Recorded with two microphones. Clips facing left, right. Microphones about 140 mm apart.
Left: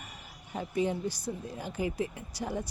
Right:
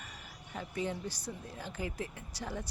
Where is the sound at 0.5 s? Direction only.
15° left (ahead or behind).